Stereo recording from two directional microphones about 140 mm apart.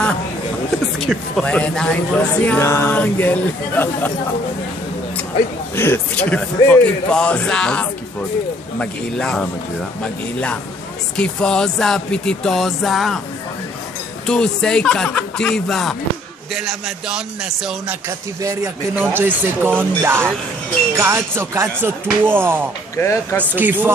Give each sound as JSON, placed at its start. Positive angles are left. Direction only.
{"t": 0.9, "sound": "speech", "side_deg": 0}
{"t": 5.8, "sound": "speech", "side_deg": 15}
{"t": 11.1, "sound": "speech", "side_deg": 5}
{"t": 14.2, "sound": "speech", "side_deg": 5}
{"t": 18.4, "sound": "speech", "side_deg": -25}
{"t": 18.9, "sound": "music", "side_deg": -15}
{"t": 22.9, "sound": "speech", "side_deg": 15}
{"t": 23.4, "sound": "music", "side_deg": -15}